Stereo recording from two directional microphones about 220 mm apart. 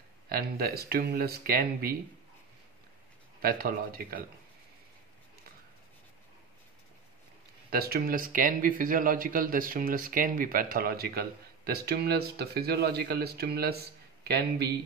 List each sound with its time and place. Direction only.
0.3 s speech: 45° right (ahead or behind)
3.3 s speech: 40° right (ahead or behind)
7.7 s speech: 45° right (ahead or behind)